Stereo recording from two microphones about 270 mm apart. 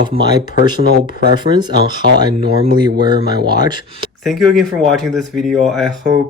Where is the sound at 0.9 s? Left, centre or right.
Right.